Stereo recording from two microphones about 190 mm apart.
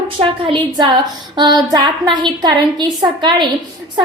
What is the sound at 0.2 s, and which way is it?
A woman's voice, 25° right (ahead or behind).